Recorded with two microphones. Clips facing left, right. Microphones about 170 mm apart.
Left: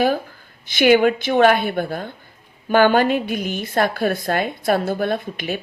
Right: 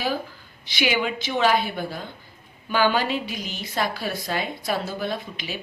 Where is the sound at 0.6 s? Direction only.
50° left (ahead or behind).